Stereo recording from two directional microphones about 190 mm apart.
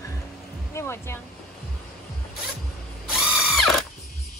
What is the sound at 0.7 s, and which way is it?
Speech, 15° left (ahead or behind).